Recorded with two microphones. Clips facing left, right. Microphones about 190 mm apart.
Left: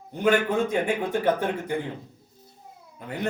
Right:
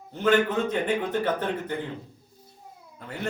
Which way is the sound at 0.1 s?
15° left (ahead or behind).